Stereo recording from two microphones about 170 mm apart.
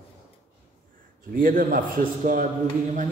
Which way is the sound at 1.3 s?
55° right (ahead or behind).